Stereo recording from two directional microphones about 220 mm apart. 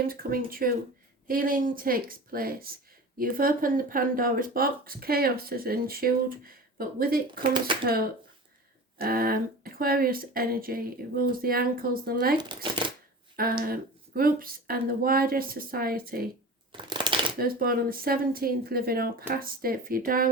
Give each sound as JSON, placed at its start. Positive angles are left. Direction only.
{"t": 0.1, "sound": "speech", "side_deg": -40}
{"t": 12.4, "sound": "speech", "side_deg": -20}
{"t": 13.3, "sound": "speech", "side_deg": -40}
{"t": 16.7, "sound": "shuffling cards", "side_deg": -20}
{"t": 17.3, "sound": "speech", "side_deg": -40}